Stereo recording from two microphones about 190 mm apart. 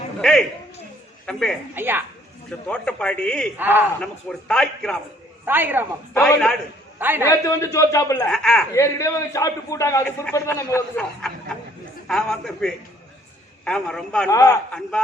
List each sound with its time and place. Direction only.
0.2 s a man's voice: 5° left (ahead or behind)
1.7 s a woman's voice: 10° right (ahead or behind)
2.5 s a man's voice: 5° left (ahead or behind)
3.6 s a woman's voice: 10° right (ahead or behind)
4.0 s a man's voice: 5° left (ahead or behind)
5.5 s a woman's voice: 10° right (ahead or behind)
6.1 s a man's voice: 5° left (ahead or behind)
7.0 s a woman's voice: 10° right (ahead or behind)
7.3 s a man's voice: 15° left (ahead or behind)
8.3 s a man's voice: 5° left (ahead or behind)
8.7 s a man's voice: 15° left (ahead or behind)